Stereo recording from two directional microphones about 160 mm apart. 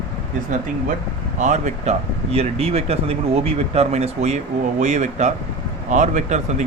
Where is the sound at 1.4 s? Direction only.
50° right (ahead or behind).